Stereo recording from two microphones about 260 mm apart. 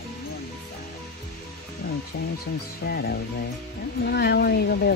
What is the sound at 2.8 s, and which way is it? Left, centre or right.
Speech, left.